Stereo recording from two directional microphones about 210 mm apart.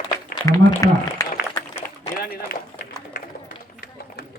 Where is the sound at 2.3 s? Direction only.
45° left (ahead or behind).